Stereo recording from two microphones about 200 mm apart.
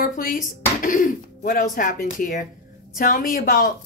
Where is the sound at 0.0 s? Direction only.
45° left (ahead or behind).